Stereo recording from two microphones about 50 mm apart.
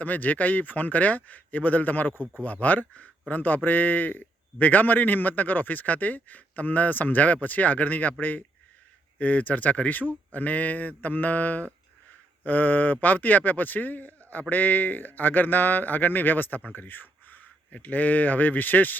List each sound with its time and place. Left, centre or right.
0.0 s a man's voice: left
16.7 s a sound: left
17.8 s a man's voice: left